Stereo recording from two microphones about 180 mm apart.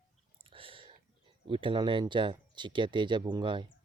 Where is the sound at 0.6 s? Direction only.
30° right (ahead or behind).